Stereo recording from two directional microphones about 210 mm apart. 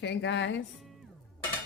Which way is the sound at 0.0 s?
55° left (ahead or behind).